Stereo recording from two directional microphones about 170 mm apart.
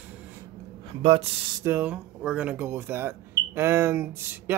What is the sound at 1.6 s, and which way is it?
Speech, 10° right (ahead or behind).